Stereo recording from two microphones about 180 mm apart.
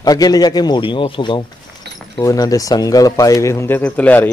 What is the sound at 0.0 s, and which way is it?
Speech, 20° left (ahead or behind).